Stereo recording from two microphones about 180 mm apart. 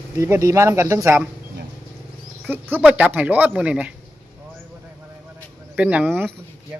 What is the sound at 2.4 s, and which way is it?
Speech, 10° right (ahead or behind).